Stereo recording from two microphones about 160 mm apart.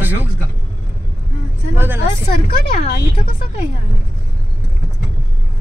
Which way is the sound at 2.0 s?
50° left (ahead or behind).